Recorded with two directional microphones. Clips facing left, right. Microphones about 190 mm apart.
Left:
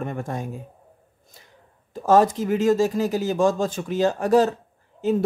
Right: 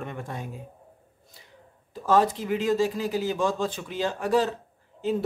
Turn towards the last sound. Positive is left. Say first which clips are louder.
# left 5 dB
turn(degrees=45)  # may be behind; listen again after turning